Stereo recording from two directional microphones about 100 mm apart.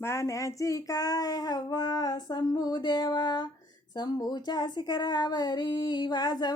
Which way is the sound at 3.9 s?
45° left (ahead or behind).